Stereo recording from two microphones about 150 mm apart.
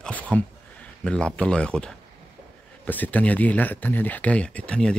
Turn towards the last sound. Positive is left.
turn(degrees=5)  # may be behind; listen again after turning